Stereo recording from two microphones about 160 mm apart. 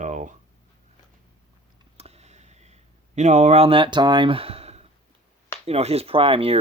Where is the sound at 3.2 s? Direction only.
45° right (ahead or behind).